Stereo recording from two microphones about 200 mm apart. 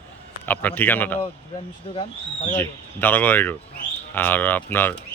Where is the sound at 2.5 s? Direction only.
10° left (ahead or behind).